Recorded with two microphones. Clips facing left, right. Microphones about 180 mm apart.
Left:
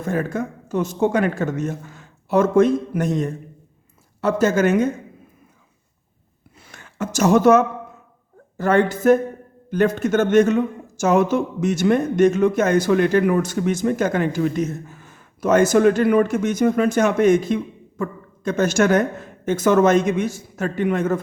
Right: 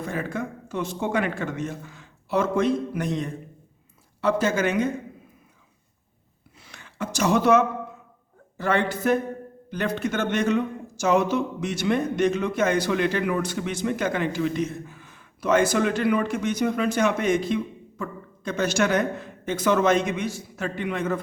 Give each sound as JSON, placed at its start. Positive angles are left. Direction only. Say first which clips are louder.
{"t": 0.0, "sound": "a man's voice", "louder": "left 6 dB", "side_deg": 45}
{"t": 6.6, "sound": "a sound", "louder": "left 4 dB", "side_deg": 50}
{"t": 8.5, "sound": "a man's voice", "louder": "left 6 dB", "side_deg": 45}